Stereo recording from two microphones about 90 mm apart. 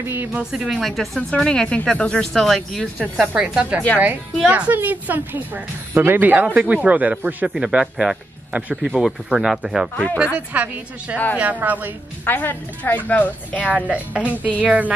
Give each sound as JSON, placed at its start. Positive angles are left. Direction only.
{"t": 0.0, "sound": "a woman's voice", "side_deg": -25}
{"t": 0.4, "sound": "speech", "side_deg": -5}
{"t": 3.2, "sound": "a woman's voice", "side_deg": -10}
{"t": 9.0, "sound": "speech", "side_deg": -5}
{"t": 12.3, "sound": "speech", "side_deg": 20}
{"t": 13.7, "sound": "speech", "side_deg": -15}